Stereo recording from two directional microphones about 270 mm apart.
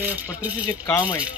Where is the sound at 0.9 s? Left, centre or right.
Centre.